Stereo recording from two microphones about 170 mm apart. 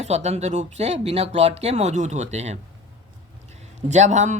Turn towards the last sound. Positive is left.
turn(degrees=-45)  # may be behind; listen again after turning